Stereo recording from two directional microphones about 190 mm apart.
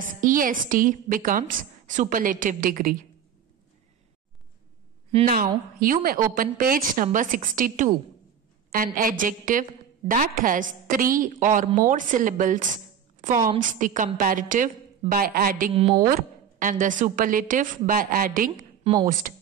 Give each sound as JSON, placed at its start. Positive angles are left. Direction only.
{"t": 0.2, "sound": "a woman's voice", "side_deg": -45}
{"t": 5.2, "sound": "a woman's voice", "side_deg": -50}
{"t": 15.7, "sound": "a woman's voice", "side_deg": -25}
{"t": 16.1, "sound": "a woman's voice", "side_deg": -45}